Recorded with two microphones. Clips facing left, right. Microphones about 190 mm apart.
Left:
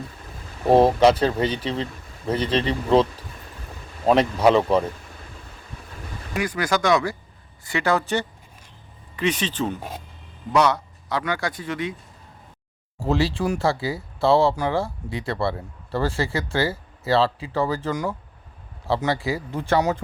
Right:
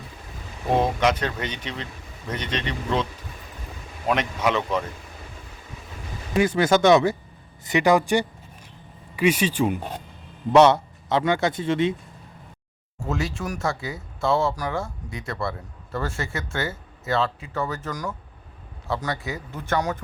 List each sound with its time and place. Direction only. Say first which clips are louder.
0.7 s speech: left 6 dB; 35° left (ahead or behind)
6.3 s speech: right 5 dB; 25° right (ahead or behind)
10.5 s speech: right 5 dB; 25° right (ahead or behind)
13.0 s speech: left 6 dB; 35° left (ahead or behind)